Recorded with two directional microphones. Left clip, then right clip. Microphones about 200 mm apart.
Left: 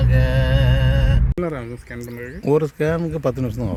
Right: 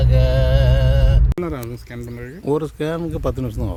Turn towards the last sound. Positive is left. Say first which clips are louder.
# left 2 dB
turn(degrees=5)  # may be behind; listen again after turning